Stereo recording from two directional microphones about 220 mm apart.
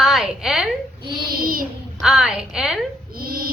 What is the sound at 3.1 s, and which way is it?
Dog, 40° right (ahead or behind).